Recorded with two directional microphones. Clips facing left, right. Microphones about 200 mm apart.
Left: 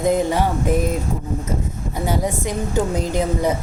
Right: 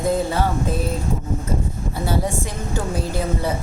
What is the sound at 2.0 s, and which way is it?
A woman's voice, 15° left (ahead or behind).